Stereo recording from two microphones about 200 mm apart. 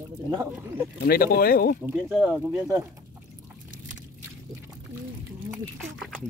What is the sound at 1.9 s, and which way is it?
Speech, 10° right (ahead or behind).